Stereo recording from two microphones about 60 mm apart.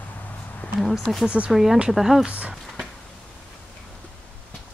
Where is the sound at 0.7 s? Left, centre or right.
Centre.